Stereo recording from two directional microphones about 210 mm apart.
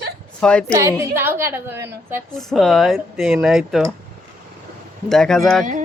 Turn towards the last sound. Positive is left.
turn(degrees=0)  # may be behind; listen again after turning